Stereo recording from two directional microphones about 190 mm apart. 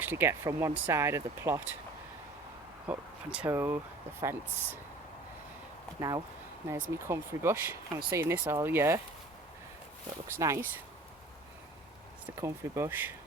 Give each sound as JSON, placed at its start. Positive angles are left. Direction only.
{"t": 0.0, "sound": "speech", "side_deg": -10}
{"t": 2.8, "sound": "speech", "side_deg": -10}
{"t": 6.0, "sound": "speech", "side_deg": -20}
{"t": 10.2, "sound": "speech", "side_deg": -15}
{"t": 12.2, "sound": "speech", "side_deg": -15}